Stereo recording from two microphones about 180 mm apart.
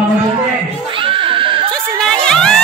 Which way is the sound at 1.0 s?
30° right (ahead or behind).